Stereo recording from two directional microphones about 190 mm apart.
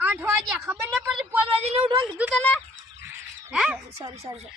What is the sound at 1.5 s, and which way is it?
Speech, 30° right (ahead or behind).